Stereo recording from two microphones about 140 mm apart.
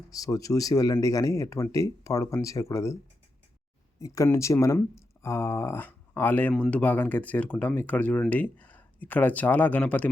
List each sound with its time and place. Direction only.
0.1 s speech: 25° left (ahead or behind)
4.0 s speech: 25° left (ahead or behind)